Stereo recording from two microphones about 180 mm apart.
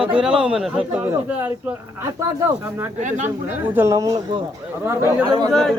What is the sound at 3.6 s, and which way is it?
Speech, 10° right (ahead or behind).